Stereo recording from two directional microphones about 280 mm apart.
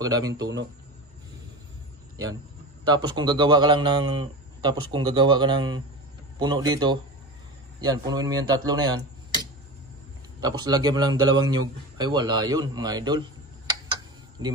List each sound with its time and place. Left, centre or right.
0.0 s a man's voice: centre
2.9 s a man's voice: centre
10.4 s a man's voice: centre
12.0 s a sound: centre